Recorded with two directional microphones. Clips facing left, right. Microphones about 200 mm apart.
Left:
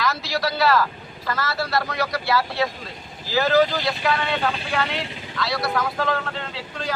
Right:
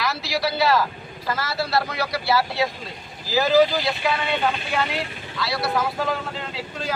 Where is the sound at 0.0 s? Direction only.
10° right (ahead or behind).